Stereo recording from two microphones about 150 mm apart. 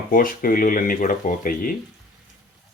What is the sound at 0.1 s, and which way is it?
Speech, 65° left (ahead or behind).